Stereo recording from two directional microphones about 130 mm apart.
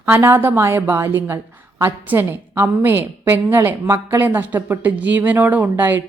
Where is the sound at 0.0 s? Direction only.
20° right (ahead or behind).